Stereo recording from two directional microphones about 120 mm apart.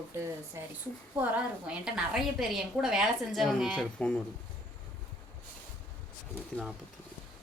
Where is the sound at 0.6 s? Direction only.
25° right (ahead or behind).